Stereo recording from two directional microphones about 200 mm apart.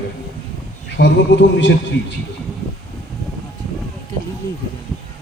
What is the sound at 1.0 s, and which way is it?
Speech, 70° left (ahead or behind).